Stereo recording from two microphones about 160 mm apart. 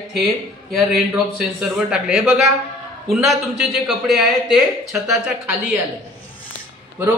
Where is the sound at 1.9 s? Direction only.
5° right (ahead or behind).